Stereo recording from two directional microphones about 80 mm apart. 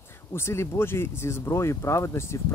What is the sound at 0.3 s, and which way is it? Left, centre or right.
Speech, left.